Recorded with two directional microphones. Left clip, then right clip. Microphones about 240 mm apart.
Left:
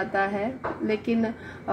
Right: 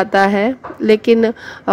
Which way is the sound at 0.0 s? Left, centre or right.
Right.